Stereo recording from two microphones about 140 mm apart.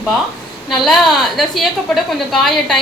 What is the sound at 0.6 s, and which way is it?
A woman's voice, centre (ahead or behind).